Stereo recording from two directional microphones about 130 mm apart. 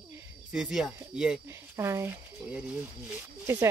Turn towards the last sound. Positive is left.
turn(degrees=-20)  # may be behind; listen again after turning